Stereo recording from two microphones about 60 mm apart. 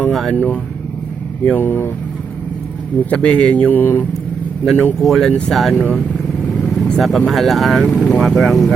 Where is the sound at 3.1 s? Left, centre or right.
Centre.